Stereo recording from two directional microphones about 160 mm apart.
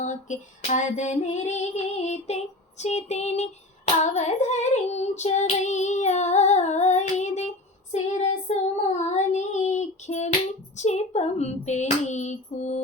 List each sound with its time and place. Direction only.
0.0 s child singing: 50° left (ahead or behind)